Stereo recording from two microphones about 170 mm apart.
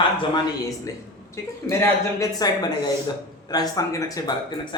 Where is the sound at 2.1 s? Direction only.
25° left (ahead or behind).